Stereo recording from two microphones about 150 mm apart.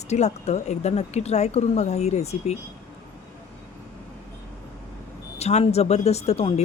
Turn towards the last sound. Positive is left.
turn(degrees=45)  # may be behind; listen again after turning